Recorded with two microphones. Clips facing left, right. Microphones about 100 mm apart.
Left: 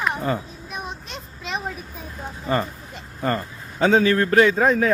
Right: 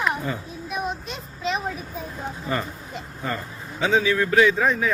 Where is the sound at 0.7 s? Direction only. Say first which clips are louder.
Right 4 dB; centre (ahead or behind).